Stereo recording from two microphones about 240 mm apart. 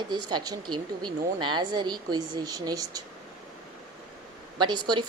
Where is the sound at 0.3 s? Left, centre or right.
Centre.